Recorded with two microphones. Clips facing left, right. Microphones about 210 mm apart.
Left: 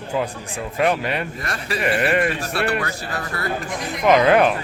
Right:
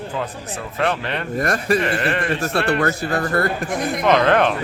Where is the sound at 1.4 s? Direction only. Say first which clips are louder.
Right 9 dB; 50° right (ahead or behind).